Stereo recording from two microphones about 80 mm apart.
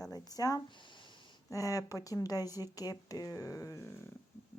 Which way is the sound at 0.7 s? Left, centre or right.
Left.